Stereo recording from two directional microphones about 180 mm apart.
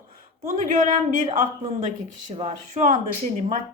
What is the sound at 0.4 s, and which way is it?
A woman's voice, 45° right (ahead or behind).